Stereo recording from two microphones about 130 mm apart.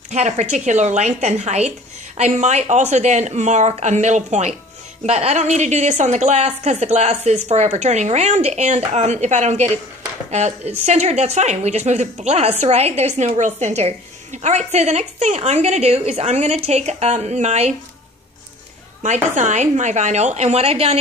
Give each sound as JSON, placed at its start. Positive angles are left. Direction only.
{"t": 0.1, "sound": "a woman's voice", "side_deg": -60}
{"t": 19.0, "sound": "a woman's voice", "side_deg": -70}